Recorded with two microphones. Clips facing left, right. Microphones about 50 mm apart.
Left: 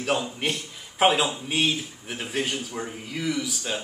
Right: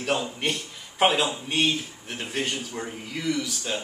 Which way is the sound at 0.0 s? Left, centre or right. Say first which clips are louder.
Even; centre.